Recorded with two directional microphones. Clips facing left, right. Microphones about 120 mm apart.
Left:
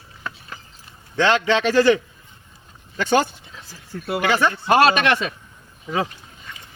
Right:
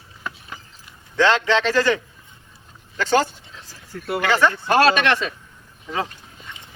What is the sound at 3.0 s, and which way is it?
Speech, 15° left (ahead or behind).